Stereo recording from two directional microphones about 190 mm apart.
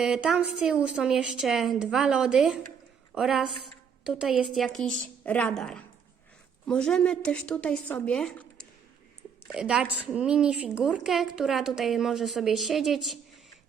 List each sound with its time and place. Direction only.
0.0 s a woman's voice: 5° right (ahead or behind)